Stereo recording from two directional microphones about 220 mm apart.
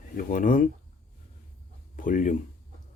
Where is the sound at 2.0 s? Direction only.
35° left (ahead or behind).